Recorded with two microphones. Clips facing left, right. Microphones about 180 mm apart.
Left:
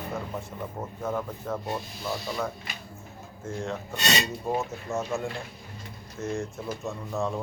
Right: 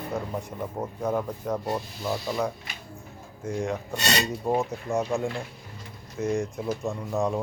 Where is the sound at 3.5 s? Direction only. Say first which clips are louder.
Right 4 dB; 15° right (ahead or behind).